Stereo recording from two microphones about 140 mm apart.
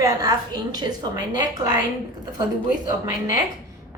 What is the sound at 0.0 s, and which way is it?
A woman's voice, 25° right (ahead or behind).